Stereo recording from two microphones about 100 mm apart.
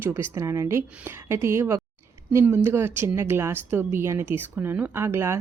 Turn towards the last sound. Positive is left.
turn(degrees=-25)  # may be behind; listen again after turning